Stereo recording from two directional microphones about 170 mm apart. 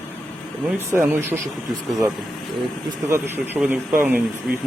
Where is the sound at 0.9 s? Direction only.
15° right (ahead or behind).